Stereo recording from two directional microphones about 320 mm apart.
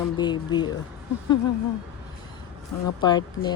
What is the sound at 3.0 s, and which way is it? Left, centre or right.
Speech, centre.